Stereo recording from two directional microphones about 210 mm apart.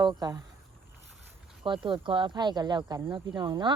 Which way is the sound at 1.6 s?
25° right (ahead or behind).